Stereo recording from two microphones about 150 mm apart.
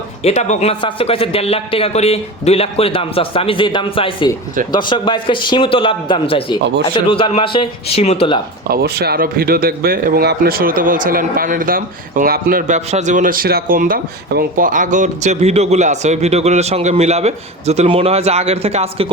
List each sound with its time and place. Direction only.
0.2 s a man's voice: 45° left (ahead or behind)
8.6 s speech: 90° right; by 19.1 s 40° right (ahead or behind)